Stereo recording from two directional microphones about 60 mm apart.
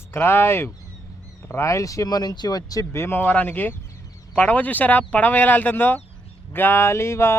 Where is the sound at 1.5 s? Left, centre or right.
Left.